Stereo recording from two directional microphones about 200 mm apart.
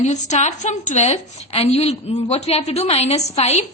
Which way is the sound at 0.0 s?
35° left (ahead or behind).